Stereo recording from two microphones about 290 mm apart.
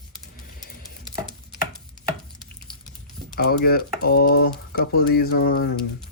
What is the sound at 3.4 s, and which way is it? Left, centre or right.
Speech, left.